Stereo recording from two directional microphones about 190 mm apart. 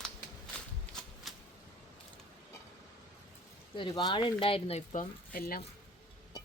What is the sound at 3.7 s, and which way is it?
Speech, 25° left (ahead or behind).